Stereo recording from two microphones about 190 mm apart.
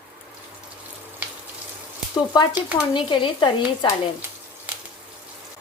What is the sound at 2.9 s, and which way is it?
A woman's voice, 25° left (ahead or behind).